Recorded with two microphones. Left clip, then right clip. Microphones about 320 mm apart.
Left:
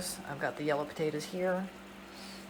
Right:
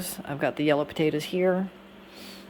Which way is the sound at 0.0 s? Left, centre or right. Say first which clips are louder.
Right 7 dB; right.